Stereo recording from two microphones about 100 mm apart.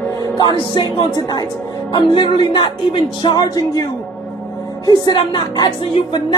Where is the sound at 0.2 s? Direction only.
50° left (ahead or behind).